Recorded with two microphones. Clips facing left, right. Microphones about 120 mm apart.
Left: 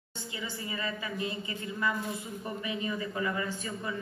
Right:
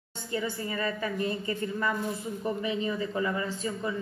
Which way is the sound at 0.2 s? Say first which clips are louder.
Right 7 dB; 50° right (ahead or behind).